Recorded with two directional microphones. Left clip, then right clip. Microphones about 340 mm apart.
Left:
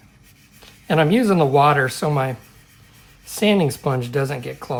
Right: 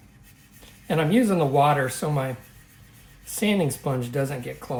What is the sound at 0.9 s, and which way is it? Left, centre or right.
Speech, left.